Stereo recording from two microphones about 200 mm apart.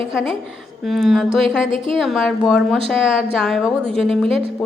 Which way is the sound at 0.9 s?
Centre (ahead or behind).